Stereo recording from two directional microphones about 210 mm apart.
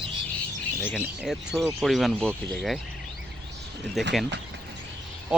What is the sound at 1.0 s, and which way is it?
Speech, 5° right (ahead or behind).